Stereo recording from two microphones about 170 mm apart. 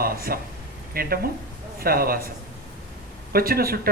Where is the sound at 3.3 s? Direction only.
60° right (ahead or behind).